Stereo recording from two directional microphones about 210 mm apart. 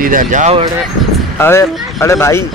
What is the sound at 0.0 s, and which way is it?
Speech, 40° right (ahead or behind).